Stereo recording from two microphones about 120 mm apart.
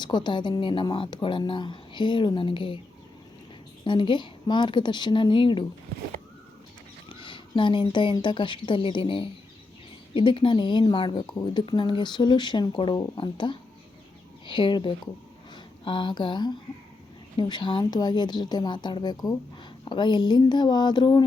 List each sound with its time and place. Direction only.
0.0 s speech: 40° left (ahead or behind)
3.8 s speech: 40° left (ahead or behind)
7.1 s speech: 45° left (ahead or behind)